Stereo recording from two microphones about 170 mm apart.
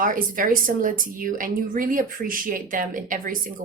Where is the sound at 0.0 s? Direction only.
50° right (ahead or behind).